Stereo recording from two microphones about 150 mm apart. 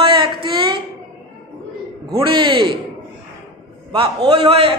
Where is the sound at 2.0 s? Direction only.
35° right (ahead or behind).